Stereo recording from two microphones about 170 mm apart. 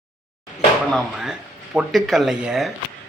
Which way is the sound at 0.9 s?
Centre (ahead or behind).